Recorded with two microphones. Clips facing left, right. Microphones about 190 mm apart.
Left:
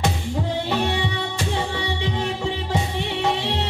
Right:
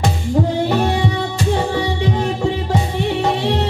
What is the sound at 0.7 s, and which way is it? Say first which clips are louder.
Music: right 6 dB; 45° right (ahead or behind).